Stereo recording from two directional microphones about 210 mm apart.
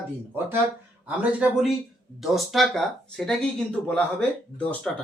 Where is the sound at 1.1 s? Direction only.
5° right (ahead or behind).